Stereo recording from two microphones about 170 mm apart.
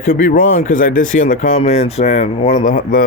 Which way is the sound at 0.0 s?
55° left (ahead or behind).